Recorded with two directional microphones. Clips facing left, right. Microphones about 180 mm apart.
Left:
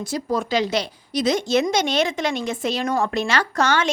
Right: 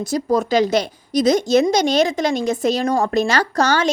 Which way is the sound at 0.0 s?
40° right (ahead or behind).